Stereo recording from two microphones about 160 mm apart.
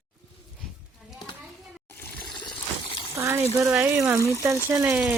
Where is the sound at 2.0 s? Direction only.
10° left (ahead or behind).